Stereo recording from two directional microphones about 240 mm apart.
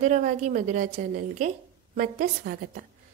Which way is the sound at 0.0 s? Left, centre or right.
Right.